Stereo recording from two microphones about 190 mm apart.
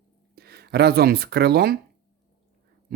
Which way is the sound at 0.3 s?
55° right (ahead or behind).